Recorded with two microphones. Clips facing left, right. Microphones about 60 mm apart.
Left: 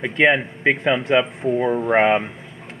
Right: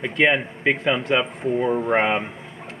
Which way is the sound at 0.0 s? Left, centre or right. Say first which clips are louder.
Left 2 dB; centre.